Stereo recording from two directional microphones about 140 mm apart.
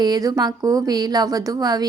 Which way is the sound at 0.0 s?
30° right (ahead or behind).